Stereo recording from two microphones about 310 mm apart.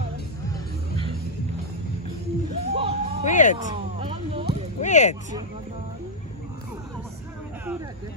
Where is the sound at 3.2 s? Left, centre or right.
Left.